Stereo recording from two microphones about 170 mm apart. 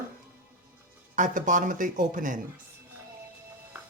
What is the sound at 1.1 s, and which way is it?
Speech, 50° right (ahead or behind).